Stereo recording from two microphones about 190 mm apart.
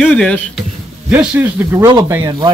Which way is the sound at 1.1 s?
10° right (ahead or behind).